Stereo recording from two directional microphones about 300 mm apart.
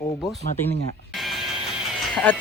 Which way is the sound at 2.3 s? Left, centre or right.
Centre.